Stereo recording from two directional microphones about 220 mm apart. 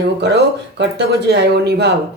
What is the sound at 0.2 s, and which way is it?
Speech, 50° right (ahead or behind).